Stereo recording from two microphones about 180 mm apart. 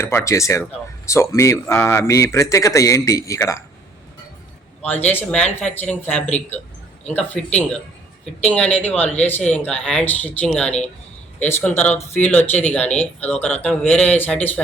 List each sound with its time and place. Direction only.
0.0 s speech: 15° left (ahead or behind)
5.0 s speech: 10° left (ahead or behind)